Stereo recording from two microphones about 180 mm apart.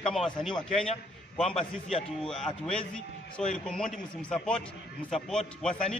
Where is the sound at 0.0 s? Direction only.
Centre (ahead or behind).